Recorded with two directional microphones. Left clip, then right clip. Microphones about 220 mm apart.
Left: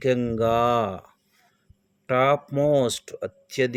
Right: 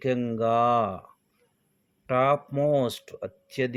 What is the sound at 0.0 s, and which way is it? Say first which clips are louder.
Speech: left 4 dB; 20° left (ahead or behind).